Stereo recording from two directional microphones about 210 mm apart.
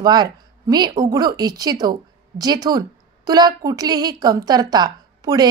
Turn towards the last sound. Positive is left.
turn(degrees=-20)  # may be behind; listen again after turning